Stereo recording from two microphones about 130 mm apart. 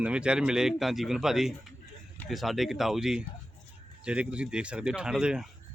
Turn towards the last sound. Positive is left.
turn(degrees=-5)  # may be behind; listen again after turning